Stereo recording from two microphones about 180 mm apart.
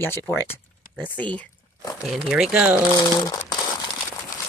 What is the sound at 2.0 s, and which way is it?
Speech, centre (ahead or behind).